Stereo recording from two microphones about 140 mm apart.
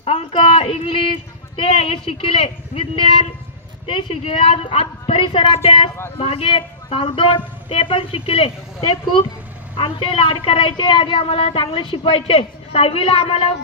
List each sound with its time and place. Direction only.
0.0 s a woman's voice: 45° left (ahead or behind)
3.8 s a woman's voice: 45° left (ahead or behind)
9.8 s a woman's voice: 40° left (ahead or behind)